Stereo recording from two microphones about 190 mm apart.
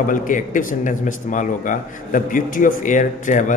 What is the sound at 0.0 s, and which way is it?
Speech, 45° left (ahead or behind).